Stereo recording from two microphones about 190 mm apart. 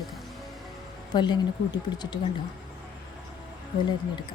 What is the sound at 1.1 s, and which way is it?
A woman's voice, 25° left (ahead or behind).